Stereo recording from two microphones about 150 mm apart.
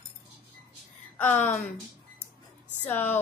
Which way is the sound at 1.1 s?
15° left (ahead or behind).